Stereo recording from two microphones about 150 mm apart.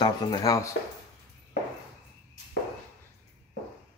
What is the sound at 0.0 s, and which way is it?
Speech, 25° left (ahead or behind).